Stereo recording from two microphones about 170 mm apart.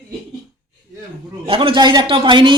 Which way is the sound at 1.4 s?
30° right (ahead or behind).